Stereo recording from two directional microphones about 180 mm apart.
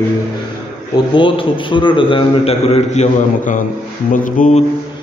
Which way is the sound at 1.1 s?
30° left (ahead or behind).